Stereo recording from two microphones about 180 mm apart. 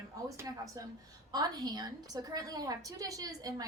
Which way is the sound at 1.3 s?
20° right (ahead or behind).